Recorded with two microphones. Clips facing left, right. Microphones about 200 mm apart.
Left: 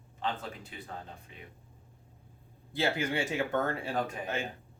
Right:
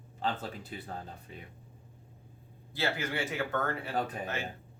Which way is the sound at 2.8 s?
25° left (ahead or behind).